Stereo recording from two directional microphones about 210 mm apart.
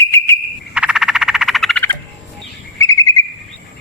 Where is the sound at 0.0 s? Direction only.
15° left (ahead or behind).